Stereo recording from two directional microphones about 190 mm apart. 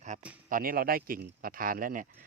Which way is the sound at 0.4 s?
50° right (ahead or behind).